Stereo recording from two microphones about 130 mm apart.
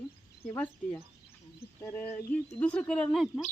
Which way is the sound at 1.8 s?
20° left (ahead or behind).